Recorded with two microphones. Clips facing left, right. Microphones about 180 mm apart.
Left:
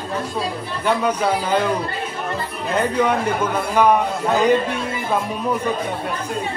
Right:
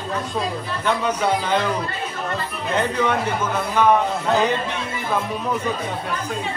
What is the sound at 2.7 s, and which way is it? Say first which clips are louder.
A man's voice: left 2 dB; 10° left (ahead or behind).